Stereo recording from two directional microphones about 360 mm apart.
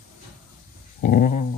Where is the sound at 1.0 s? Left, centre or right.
Left.